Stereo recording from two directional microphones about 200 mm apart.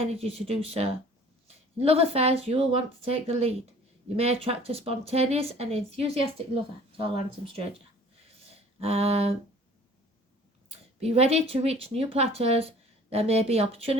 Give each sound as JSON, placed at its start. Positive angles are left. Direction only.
{"t": 0.0, "sound": "speech", "side_deg": -30}
{"t": 8.4, "sound": "a sound", "side_deg": -30}
{"t": 10.7, "sound": "speech", "side_deg": -30}